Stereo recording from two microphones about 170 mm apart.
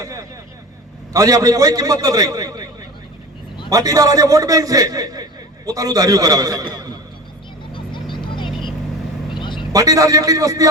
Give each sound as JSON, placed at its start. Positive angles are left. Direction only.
{"t": 0.0, "sound": "a man's voice", "side_deg": -20}
{"t": 3.7, "sound": "a man's voice", "side_deg": -20}
{"t": 8.1, "sound": "vehicle", "side_deg": 30}
{"t": 9.7, "sound": "a man's voice", "side_deg": -20}